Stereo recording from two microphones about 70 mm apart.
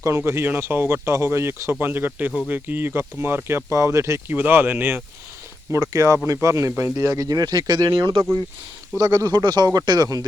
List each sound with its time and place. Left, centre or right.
0.3 s speech: right
1.8 s speech: right
4.3 s speech: right
5.7 s speech: right
7.2 s speech: right
9.0 s speech: right